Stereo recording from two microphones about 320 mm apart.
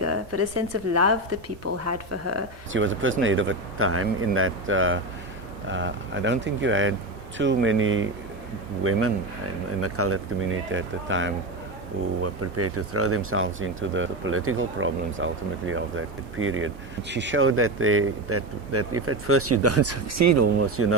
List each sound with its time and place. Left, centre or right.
0.0 s a woman's voice: right